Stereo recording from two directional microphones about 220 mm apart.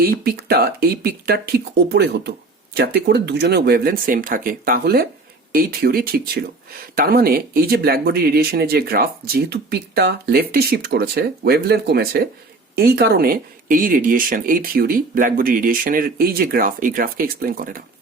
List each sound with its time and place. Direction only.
0.0 s speech: 45° right (ahead or behind)